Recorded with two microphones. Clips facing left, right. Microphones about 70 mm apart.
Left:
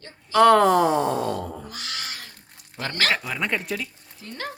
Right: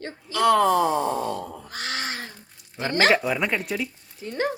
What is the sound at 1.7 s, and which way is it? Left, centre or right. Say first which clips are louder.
Crow: right 5 dB; right.